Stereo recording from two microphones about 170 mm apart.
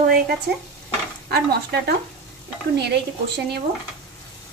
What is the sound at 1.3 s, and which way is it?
Speech, 70° right (ahead or behind).